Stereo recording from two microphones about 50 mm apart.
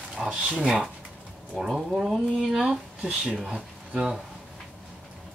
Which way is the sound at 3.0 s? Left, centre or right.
Right.